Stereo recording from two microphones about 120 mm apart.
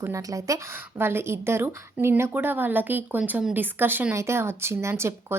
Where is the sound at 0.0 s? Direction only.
25° right (ahead or behind).